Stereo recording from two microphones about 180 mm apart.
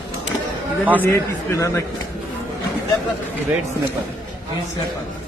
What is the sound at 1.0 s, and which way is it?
Speech, 15° left (ahead or behind).